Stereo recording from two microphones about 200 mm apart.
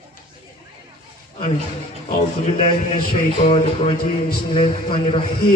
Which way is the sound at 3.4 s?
30° left (ahead or behind).